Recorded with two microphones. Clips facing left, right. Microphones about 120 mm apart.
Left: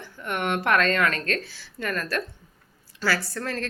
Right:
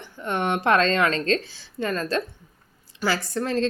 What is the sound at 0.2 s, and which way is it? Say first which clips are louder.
A woman's voice: right 2 dB; 25° right (ahead or behind).